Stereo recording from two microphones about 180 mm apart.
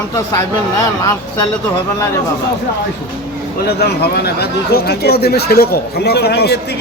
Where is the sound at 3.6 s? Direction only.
65° left (ahead or behind).